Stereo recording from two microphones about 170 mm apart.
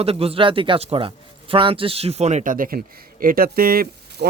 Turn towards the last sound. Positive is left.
turn(degrees=-60)  # may be behind; listen again after turning